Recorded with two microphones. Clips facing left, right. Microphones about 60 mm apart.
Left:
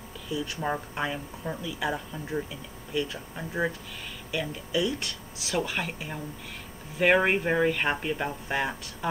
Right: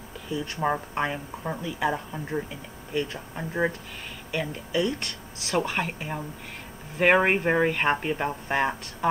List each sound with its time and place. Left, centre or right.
0.3 s speech: right
0.9 s speech: right
4.3 s speech: right
5.6 s speech: right